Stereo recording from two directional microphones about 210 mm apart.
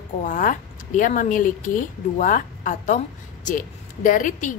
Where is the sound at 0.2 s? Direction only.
40° left (ahead or behind).